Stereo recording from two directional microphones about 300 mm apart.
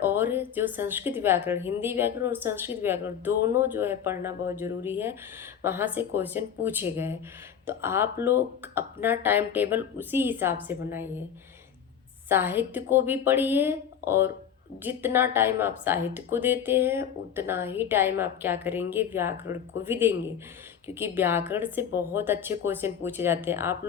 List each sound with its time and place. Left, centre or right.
0.0 s a woman's voice: centre
12.3 s a woman's voice: centre